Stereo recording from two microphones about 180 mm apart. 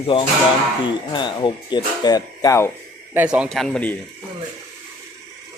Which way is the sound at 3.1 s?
5° right (ahead or behind).